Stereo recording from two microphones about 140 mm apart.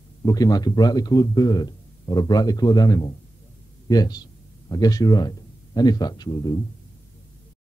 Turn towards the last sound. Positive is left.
turn(degrees=25)  # may be behind; listen again after turning